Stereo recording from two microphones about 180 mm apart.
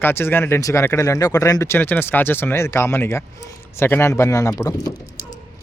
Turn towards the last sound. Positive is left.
turn(degrees=20)  # may be behind; listen again after turning